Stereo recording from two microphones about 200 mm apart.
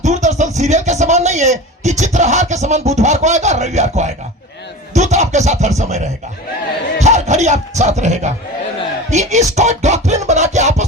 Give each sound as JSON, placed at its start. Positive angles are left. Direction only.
{"t": 0.0, "sound": "speech", "side_deg": -35}
{"t": 7.0, "sound": "speech", "side_deg": -35}